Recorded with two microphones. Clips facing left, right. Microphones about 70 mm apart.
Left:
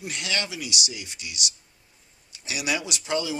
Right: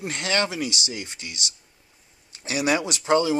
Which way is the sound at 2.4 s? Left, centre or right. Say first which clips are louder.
Right 6 dB; right.